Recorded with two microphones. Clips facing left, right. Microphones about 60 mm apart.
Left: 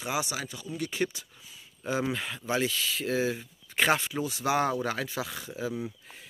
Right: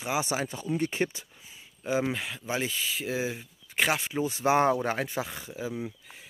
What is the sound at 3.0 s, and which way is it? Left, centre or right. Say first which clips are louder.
Speech: left 5 dB; centre.